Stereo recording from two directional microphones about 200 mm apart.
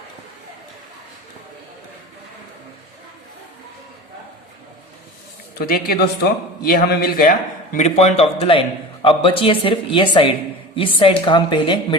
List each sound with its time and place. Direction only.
5.5 s a man's voice: 50° left (ahead or behind); by 11.9 s 25° left (ahead or behind)